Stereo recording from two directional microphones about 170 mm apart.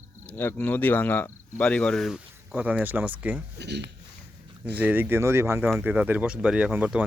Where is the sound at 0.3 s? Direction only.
10° left (ahead or behind); by 3.4 s 10° right (ahead or behind).